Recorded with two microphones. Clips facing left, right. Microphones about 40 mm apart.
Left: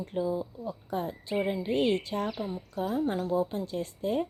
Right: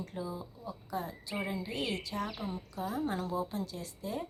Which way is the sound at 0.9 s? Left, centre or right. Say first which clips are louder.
Left 6 dB; left.